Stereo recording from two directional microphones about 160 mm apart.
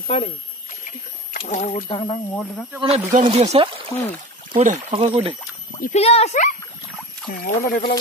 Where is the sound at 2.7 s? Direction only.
40° right (ahead or behind).